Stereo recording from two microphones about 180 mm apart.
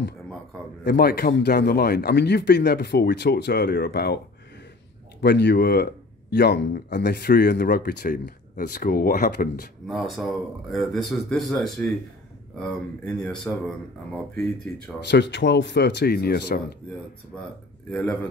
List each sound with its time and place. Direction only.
0.8 s speech: 60° left (ahead or behind)
5.2 s speech: 70° left (ahead or behind)
9.8 s speech: centre (ahead or behind)
15.0 s speech: 70° left (ahead or behind)
17.9 s speech: 5° left (ahead or behind)